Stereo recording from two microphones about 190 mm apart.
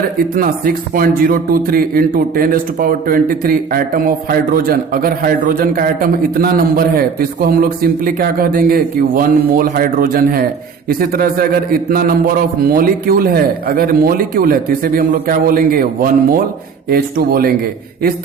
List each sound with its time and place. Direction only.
0.3 s speech: 50° right (ahead or behind)